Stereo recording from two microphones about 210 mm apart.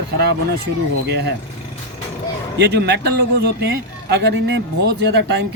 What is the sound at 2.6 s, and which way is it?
Speech, 50° right (ahead or behind).